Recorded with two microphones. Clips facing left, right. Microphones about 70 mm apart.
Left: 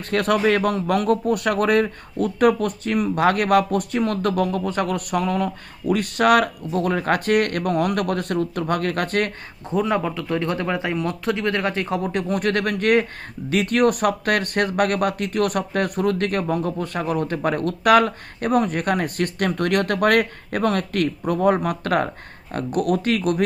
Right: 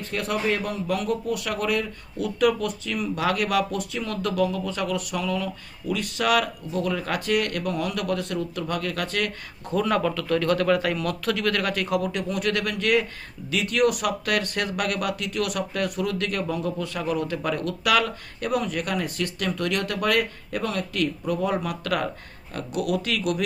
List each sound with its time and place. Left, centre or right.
0.0 s speech: left
9.6 s speech: centre; by 23.4 s left